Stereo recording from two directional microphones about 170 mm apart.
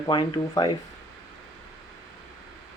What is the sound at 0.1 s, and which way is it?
Speech, 25° left (ahead or behind).